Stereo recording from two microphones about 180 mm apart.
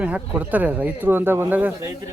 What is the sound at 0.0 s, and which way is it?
Speech, 10° right (ahead or behind).